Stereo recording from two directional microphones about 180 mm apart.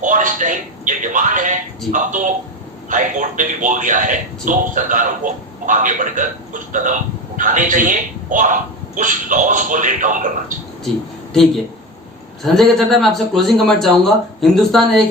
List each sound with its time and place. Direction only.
0.0 s a man's voice: 45° right (ahead or behind)
12.4 s a man's voice: centre (ahead or behind)